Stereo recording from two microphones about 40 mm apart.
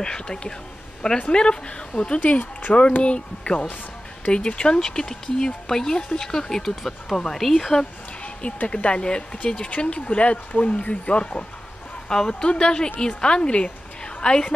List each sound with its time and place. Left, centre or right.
0.0 s speech: centre
2.2 s speech: left; by 6.8 s centre
6.8 s speech: centre
8.2 s a sound: left
8.6 s speech: left
12.1 s a woman's voice: centre